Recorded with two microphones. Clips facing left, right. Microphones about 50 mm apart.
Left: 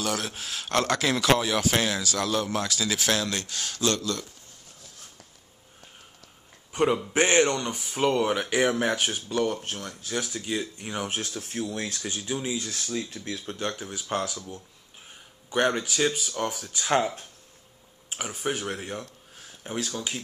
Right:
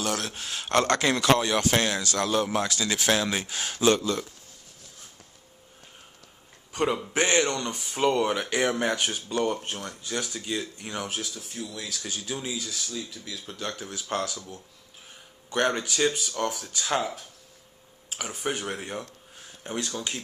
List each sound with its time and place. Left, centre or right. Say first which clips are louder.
0.0 s speech: even; centre
6.8 s speech: left 2 dB; centre
9.5 s speech: right 1 dB; centre
10.0 s speech: left 1 dB; centre
11.1 s speech: left 2 dB; left
12.0 s speech: left 2 dB; centre
12.5 s speech: left 3 dB; left
13.7 s speech: even; centre
15.5 s speech: left 1 dB; centre
18.1 s speech: left 1 dB; centre
18.4 s speech: left 1 dB; centre